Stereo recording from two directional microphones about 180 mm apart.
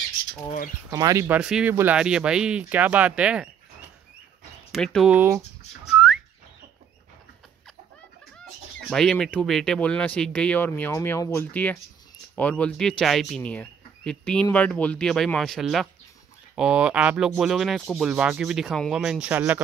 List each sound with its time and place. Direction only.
0.8 s speech: 20° right (ahead or behind)
4.7 s speech: centre (ahead or behind)
5.1 s speech: 10° right (ahead or behind)
8.9 s speech: centre (ahead or behind)